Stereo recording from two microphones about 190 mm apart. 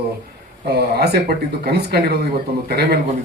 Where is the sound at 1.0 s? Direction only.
55° right (ahead or behind).